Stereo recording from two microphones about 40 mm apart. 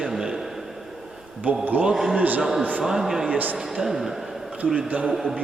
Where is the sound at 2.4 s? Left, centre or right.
Centre.